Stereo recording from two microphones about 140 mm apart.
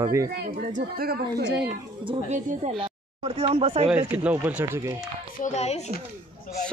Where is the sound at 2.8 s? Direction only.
40° right (ahead or behind).